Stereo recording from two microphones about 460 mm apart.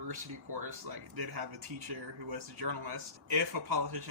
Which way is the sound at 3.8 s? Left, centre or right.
Right.